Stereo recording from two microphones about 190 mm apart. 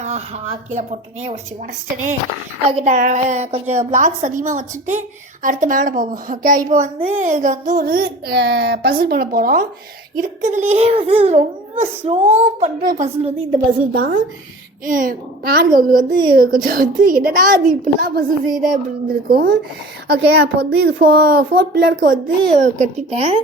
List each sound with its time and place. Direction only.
0.0 s a child's voice: 35° right (ahead or behind)
2.6 s a woman's voice: 35° right (ahead or behind)
10.2 s a child's voice: 40° right (ahead or behind)
12.5 s a child's voice: 45° right (ahead or behind)